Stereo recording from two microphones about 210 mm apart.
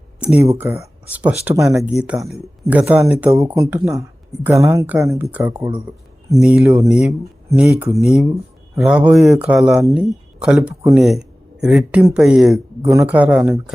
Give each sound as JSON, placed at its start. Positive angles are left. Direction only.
{"t": 0.3, "sound": "speech", "side_deg": -10}